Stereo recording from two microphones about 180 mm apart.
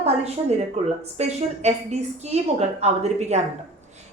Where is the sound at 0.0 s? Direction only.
35° right (ahead or behind).